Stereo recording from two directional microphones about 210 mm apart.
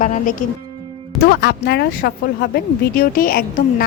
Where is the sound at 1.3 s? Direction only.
50° left (ahead or behind).